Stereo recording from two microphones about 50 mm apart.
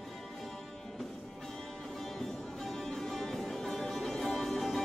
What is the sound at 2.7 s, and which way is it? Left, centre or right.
Music, centre.